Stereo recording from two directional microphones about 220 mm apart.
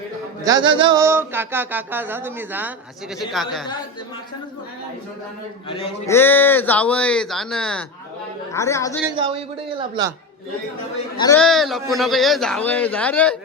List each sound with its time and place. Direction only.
0.4 s a sound: 20° right (ahead or behind)
3.4 s a man's voice: centre (ahead or behind)
5.6 s a man's voice: 25° left (ahead or behind)
6.1 s a man's voice: 10° left (ahead or behind)
8.5 s a woman's voice: 15° left (ahead or behind)
9.1 s a man's voice: 20° right (ahead or behind)
11.3 s a man's voice: centre (ahead or behind)